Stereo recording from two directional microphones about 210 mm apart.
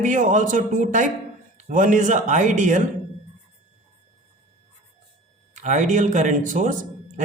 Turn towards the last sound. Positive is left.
turn(degrees=-35)  # may be behind; listen again after turning